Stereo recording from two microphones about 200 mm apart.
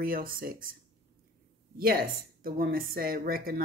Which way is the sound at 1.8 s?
50° right (ahead or behind).